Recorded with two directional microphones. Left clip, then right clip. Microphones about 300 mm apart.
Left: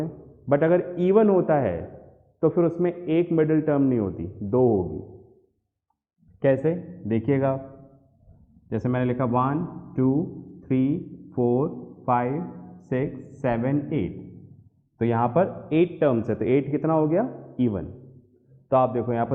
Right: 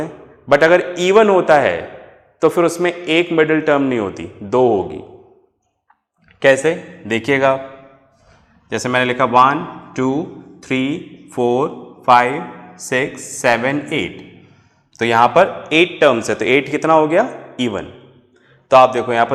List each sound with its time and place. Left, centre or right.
0.0 s a man's voice: centre
6.4 s a man's voice: centre
10.2 s a sound: centre
10.7 s a man's voice: centre
11.8 s a sound: centre
12.0 s a man's voice: centre